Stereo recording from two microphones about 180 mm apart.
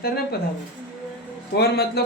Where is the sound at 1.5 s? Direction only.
65° left (ahead or behind).